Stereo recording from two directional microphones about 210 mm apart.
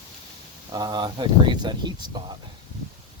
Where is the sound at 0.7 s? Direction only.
20° right (ahead or behind).